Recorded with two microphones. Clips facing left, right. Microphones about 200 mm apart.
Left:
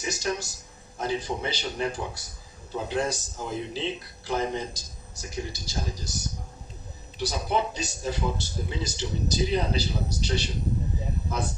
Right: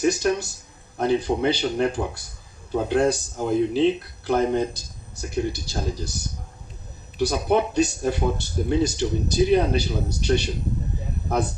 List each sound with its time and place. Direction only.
0.0 s speech: 60° right (ahead or behind)
7.2 s speech: 60° right (ahead or behind)